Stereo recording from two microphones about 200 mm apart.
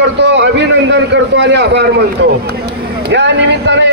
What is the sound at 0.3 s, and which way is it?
A man's voice, 60° right (ahead or behind).